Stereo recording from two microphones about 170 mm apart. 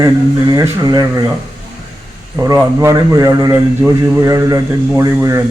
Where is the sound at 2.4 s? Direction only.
15° right (ahead or behind).